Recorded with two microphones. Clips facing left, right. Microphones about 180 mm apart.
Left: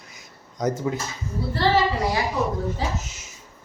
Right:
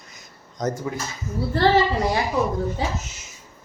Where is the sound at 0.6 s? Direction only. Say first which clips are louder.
Left 2 dB; 15° left (ahead or behind).